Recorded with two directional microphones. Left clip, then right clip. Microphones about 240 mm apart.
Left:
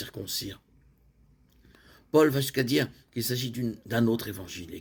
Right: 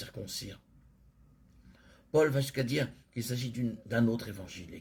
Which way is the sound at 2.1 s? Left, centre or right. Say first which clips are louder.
Left 5 dB; left.